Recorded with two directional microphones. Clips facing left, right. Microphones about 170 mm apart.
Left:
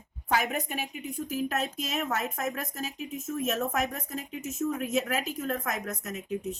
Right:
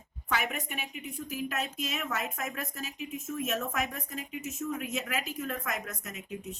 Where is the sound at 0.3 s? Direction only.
40° left (ahead or behind).